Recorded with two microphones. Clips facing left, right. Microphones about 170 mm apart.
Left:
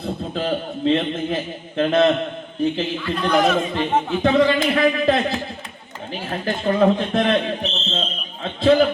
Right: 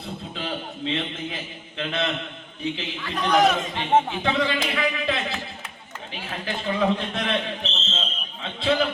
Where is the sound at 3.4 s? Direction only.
45° left (ahead or behind).